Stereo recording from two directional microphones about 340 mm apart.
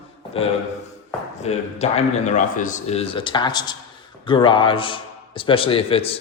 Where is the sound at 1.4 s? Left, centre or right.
Centre.